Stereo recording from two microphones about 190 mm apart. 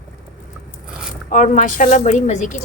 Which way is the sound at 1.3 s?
40° left (ahead or behind).